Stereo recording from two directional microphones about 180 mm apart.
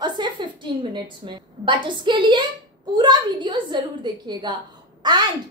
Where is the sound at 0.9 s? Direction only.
25° right (ahead or behind).